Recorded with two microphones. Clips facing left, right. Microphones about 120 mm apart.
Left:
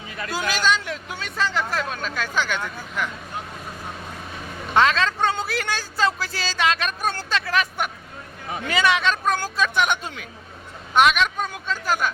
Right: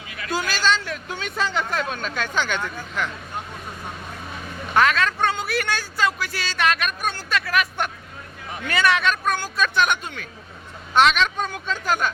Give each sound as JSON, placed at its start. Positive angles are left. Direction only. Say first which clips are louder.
{"t": 0.3, "sound": "speech", "louder": "even", "side_deg": 15}
{"t": 1.2, "sound": "speech", "louder": "even", "side_deg": 0}
{"t": 4.7, "sound": "a man's voice", "louder": "even", "side_deg": 25}
{"t": 10.9, "sound": "speech", "louder": "even", "side_deg": 10}